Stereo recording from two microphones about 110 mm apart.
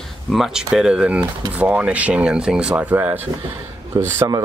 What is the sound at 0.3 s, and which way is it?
Speech, 5° right (ahead or behind).